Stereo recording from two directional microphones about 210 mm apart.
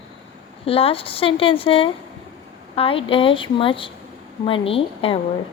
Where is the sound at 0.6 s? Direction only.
25° left (ahead or behind).